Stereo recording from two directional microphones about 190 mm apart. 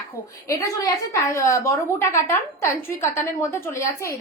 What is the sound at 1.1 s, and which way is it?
A woman's voice, 15° left (ahead or behind).